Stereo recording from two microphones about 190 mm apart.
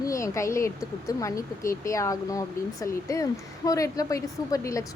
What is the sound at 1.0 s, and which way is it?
A woman's voice, 15° left (ahead or behind).